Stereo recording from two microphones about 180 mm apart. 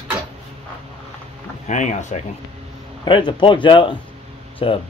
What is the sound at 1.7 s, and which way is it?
Speech, 40° left (ahead or behind).